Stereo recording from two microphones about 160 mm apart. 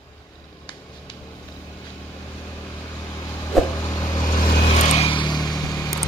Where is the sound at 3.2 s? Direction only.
20° left (ahead or behind).